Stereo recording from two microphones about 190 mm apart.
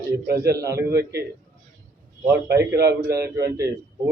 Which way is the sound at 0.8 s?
60° right (ahead or behind).